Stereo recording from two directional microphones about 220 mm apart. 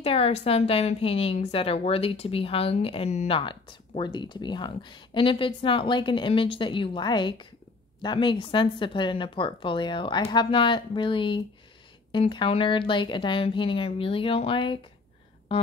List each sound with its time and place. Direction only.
0.0 s a woman's voice: 25° left (ahead or behind)